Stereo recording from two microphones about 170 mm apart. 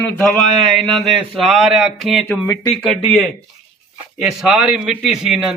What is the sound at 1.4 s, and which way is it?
Speech, centre (ahead or behind).